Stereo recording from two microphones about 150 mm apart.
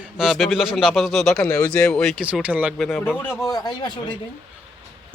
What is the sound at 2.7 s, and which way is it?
Speech, centre (ahead or behind).